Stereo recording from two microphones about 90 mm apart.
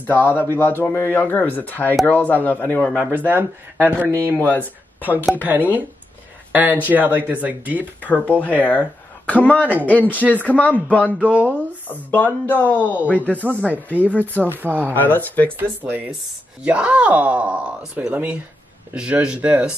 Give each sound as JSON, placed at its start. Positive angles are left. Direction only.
{"t": 0.0, "sound": "a man's voice", "side_deg": 20}
{"t": 3.1, "sound": "speech", "side_deg": -20}
{"t": 4.4, "sound": "speech", "side_deg": 20}
{"t": 5.3, "sound": "speech", "side_deg": -20}
{"t": 8.0, "sound": "speech", "side_deg": 15}
{"t": 9.7, "sound": "speech", "side_deg": -15}
{"t": 10.1, "sound": "speech", "side_deg": 15}
{"t": 11.1, "sound": "speech", "side_deg": -20}
{"t": 11.9, "sound": "a man's voice", "side_deg": 20}
{"t": 14.6, "sound": "speech", "side_deg": -20}
{"t": 15.0, "sound": "a man's voice", "side_deg": 20}
{"t": 15.6, "sound": "speech", "side_deg": -20}